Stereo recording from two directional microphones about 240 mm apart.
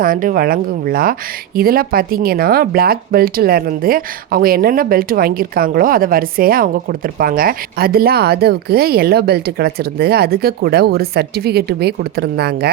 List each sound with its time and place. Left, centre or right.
0.0 s speech: right